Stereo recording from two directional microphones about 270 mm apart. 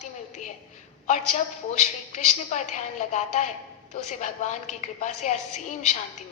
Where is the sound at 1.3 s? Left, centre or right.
Left.